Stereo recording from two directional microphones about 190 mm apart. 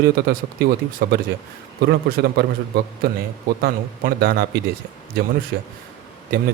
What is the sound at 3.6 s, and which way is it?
Speech, 55° right (ahead or behind).